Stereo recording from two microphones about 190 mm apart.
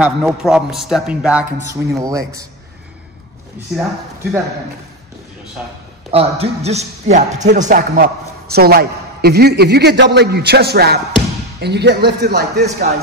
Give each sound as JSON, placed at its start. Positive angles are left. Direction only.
{"t": 0.0, "sound": "a man's voice", "side_deg": -5}
{"t": 1.7, "sound": "speech", "side_deg": -20}
{"t": 3.7, "sound": "a man's voice", "side_deg": 0}
{"t": 6.1, "sound": "a man's voice", "side_deg": -30}